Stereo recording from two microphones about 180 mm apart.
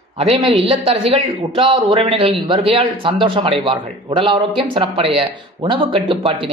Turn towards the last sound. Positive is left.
turn(degrees=-30)  # may be behind; listen again after turning